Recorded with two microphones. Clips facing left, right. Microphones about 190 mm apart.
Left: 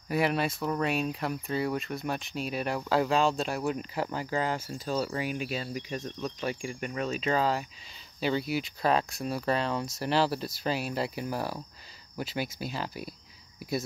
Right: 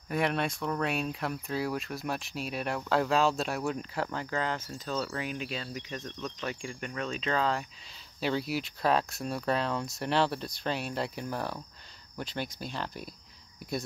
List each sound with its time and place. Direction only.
0.1 s speech: 5° left (ahead or behind)